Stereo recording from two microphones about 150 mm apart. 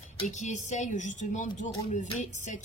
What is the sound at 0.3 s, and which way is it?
Speech, 50° left (ahead or behind).